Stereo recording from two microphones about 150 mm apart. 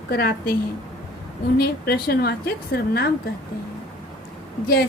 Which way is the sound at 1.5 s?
90° left.